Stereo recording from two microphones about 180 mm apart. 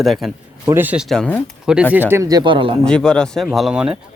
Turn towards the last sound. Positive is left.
turn(degrees=-5)  # may be behind; listen again after turning